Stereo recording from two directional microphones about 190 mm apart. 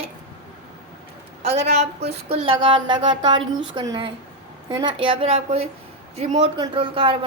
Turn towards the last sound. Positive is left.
turn(degrees=-30)  # may be behind; listen again after turning